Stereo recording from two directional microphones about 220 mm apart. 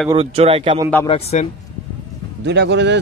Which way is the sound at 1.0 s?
25° left (ahead or behind).